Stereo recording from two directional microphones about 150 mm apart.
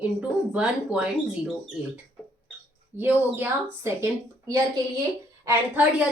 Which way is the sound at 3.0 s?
15° right (ahead or behind).